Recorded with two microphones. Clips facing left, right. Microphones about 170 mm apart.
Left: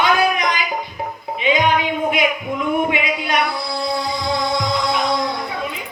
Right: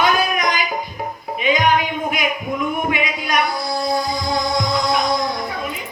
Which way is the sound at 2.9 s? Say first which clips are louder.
Left 1 dB; 30° left (ahead or behind).